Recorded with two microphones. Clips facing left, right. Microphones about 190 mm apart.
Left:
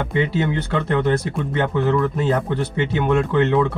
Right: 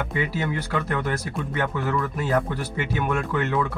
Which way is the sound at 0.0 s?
25° left (ahead or behind).